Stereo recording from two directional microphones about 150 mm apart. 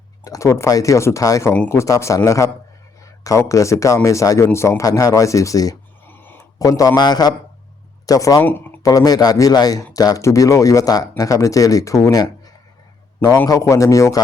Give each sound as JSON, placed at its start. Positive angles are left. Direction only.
{"t": 0.3, "sound": "speech", "side_deg": 20}
{"t": 8.4, "sound": "speech", "side_deg": 15}
{"t": 8.9, "sound": "a man's voice", "side_deg": 25}